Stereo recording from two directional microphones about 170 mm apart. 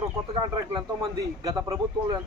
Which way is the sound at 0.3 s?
25° right (ahead or behind).